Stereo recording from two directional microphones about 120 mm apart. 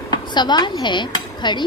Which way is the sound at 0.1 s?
35° left (ahead or behind).